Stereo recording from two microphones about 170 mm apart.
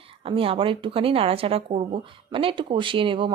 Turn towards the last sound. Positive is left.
turn(degrees=-30)  # may be behind; listen again after turning